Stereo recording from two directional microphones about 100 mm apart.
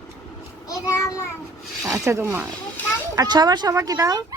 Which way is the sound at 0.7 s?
30° left (ahead or behind).